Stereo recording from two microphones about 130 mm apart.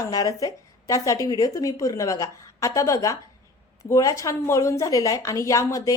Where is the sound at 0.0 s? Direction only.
30° left (ahead or behind).